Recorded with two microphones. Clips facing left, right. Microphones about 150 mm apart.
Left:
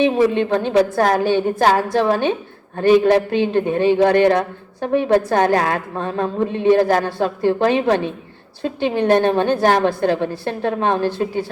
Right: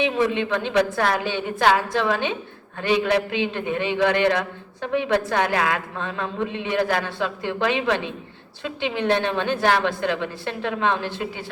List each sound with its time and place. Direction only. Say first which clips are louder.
0.0 s a man's voice: left 6 dB; 45° left (ahead or behind)